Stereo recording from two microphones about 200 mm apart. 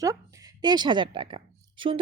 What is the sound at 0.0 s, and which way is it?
A woman's voice, 15° right (ahead or behind).